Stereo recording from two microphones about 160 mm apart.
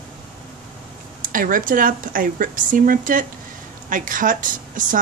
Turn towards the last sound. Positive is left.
turn(degrees=-55)  # may be behind; listen again after turning